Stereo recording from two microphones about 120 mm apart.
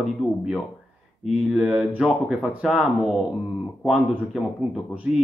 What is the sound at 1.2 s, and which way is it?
Speech, 5° right (ahead or behind).